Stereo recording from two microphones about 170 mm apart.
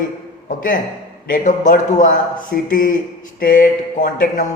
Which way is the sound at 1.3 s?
50° left (ahead or behind).